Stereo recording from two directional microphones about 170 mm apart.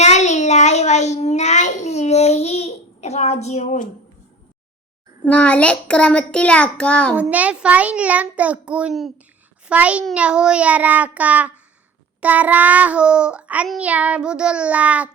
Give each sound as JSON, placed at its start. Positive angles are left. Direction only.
{"t": 0.0, "sound": "child singing", "side_deg": 40}
{"t": 5.2, "sound": "a child's voice", "side_deg": 5}
{"t": 7.2, "sound": "child singing", "side_deg": -10}